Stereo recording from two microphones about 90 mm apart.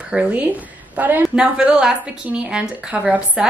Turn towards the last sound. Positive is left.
turn(degrees=-15)  # may be behind; listen again after turning